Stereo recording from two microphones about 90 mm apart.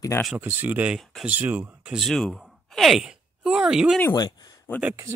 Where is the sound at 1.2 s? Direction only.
20° right (ahead or behind).